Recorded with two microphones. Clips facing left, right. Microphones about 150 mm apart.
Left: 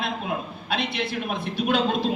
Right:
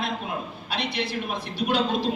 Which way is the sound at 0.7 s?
55° left (ahead or behind).